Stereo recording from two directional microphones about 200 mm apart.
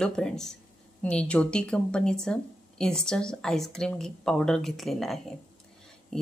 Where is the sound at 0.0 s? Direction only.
5° left (ahead or behind).